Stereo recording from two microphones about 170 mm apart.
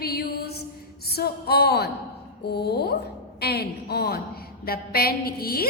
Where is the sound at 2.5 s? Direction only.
70° left (ahead or behind).